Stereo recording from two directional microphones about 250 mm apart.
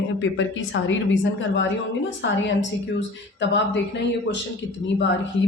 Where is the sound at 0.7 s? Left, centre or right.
Left.